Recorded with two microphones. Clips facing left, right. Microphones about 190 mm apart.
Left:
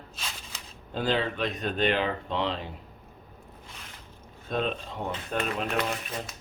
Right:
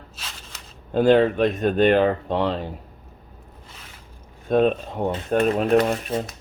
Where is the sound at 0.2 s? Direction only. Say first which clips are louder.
Left 1 dB; 5° right (ahead or behind).